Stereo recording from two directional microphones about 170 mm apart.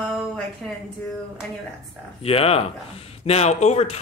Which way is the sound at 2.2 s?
35° left (ahead or behind).